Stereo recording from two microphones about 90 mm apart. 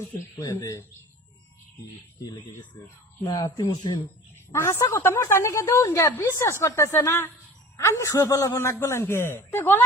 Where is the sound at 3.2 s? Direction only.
60° left (ahead or behind).